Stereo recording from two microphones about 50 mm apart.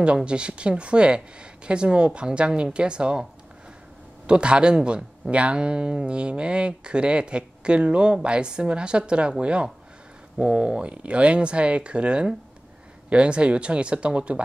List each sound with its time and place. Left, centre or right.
0.0 s speech: right
4.3 s speech: centre